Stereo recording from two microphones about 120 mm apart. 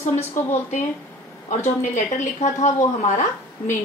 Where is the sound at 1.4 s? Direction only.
85° left.